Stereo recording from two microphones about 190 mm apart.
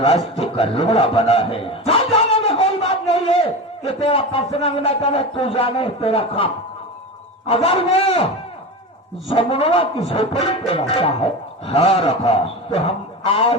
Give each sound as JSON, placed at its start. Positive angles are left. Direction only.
{"t": 0.1, "sound": "a man's voice", "side_deg": 30}
{"t": 2.3, "sound": "a sound", "side_deg": 30}
{"t": 3.8, "sound": "a man's voice", "side_deg": 30}
{"t": 9.3, "sound": "a man's voice", "side_deg": 30}